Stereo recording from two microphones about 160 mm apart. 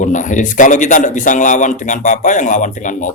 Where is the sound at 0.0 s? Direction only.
50° left (ahead or behind).